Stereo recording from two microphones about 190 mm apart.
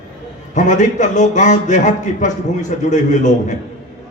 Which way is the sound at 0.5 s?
40° left (ahead or behind).